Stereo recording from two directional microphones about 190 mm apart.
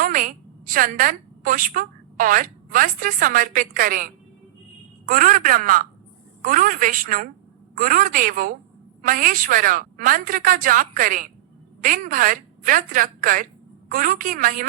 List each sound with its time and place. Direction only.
0.0 s a woman's voice: 45° right (ahead or behind)